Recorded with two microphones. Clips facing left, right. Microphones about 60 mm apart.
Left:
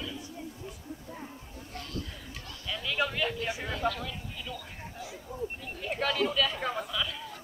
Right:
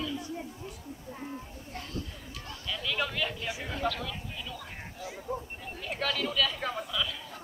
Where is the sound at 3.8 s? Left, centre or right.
Centre.